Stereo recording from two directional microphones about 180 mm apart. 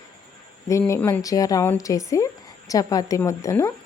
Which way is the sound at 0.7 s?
15° left (ahead or behind).